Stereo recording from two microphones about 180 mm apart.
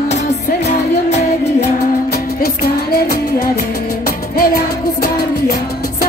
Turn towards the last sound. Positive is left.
turn(degrees=60)  # may be behind; listen again after turning